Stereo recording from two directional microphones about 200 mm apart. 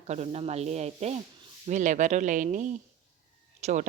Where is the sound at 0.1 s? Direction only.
30° right (ahead or behind).